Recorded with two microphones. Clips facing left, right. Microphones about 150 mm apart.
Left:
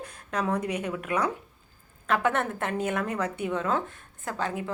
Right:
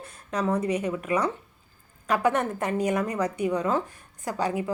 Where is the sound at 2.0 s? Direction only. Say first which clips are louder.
Right 2 dB; 10° right (ahead or behind).